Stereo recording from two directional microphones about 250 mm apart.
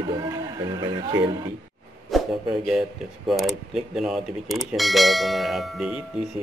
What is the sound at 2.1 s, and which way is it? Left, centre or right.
Speech, centre.